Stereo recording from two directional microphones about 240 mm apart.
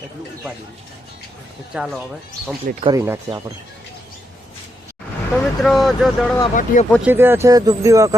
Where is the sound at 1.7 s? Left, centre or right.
Centre.